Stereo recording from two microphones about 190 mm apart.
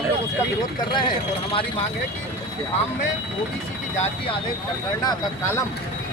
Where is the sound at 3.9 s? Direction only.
35° left (ahead or behind).